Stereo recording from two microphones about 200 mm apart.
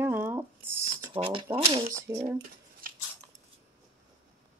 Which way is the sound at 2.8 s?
45° right (ahead or behind).